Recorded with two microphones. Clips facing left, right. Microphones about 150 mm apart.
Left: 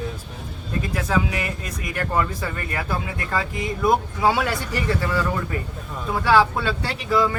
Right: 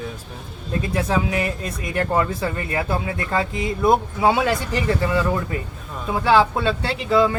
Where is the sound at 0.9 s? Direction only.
30° right (ahead or behind).